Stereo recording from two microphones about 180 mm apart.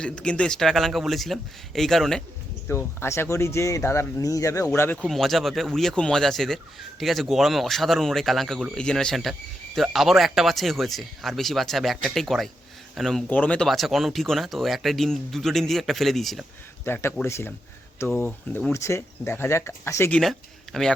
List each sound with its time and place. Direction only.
0.0 s speech: 5° left (ahead or behind)
2.6 s speech: 15° left (ahead or behind)
4.9 s speech: centre (ahead or behind)
16.8 s speech: 10° left (ahead or behind)
20.7 s a sound: 5° left (ahead or behind)